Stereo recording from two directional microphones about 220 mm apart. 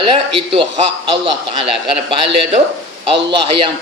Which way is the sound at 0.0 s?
25° right (ahead or behind).